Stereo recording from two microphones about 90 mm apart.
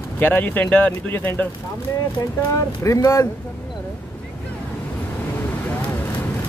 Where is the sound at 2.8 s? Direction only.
35° left (ahead or behind).